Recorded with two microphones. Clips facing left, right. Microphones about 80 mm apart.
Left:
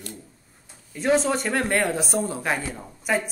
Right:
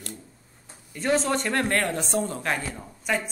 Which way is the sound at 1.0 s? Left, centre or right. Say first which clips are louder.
Left 3 dB; centre.